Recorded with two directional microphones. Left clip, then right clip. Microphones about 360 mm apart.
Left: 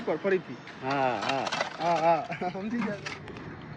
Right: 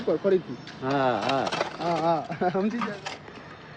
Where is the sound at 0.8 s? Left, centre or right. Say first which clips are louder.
Right 3 dB; centre.